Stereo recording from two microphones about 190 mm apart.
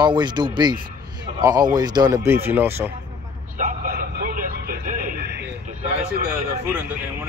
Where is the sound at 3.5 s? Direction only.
50° right (ahead or behind).